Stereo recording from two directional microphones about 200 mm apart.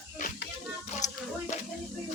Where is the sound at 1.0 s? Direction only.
35° left (ahead or behind).